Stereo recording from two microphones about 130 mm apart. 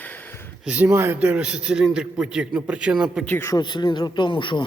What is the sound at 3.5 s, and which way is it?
Speech, 35° left (ahead or behind).